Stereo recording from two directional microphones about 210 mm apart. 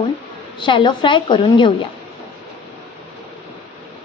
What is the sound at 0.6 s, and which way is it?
Speech, 25° left (ahead or behind).